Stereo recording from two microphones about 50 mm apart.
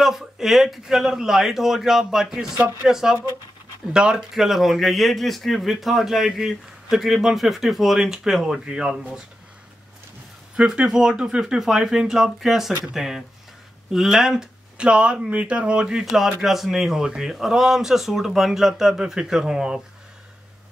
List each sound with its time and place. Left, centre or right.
0.0 s a man's voice: centre
10.5 s a man's voice: centre
16.3 s a man's voice: centre